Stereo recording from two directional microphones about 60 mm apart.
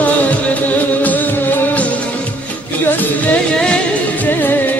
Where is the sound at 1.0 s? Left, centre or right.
Left.